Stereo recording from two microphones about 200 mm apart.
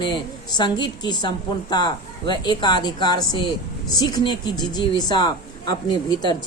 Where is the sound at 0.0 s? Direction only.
20° left (ahead or behind).